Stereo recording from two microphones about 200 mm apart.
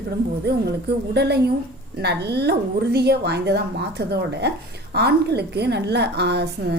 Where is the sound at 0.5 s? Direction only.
50° right (ahead or behind).